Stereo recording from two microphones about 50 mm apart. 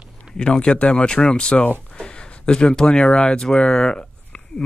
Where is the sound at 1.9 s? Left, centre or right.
Centre.